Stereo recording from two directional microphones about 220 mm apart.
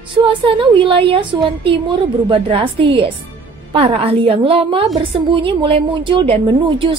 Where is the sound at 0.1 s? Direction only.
20° right (ahead or behind).